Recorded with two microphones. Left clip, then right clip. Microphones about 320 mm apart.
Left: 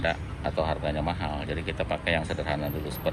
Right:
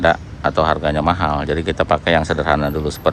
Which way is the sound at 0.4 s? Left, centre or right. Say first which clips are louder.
Right 12 dB; right.